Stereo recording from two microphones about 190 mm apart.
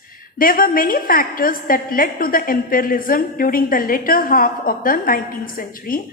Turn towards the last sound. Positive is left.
turn(degrees=50)  # may be behind; listen again after turning